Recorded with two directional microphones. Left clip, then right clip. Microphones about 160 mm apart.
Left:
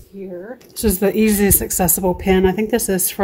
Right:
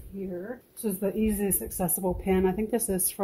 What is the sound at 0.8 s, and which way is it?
Speech, 55° left (ahead or behind).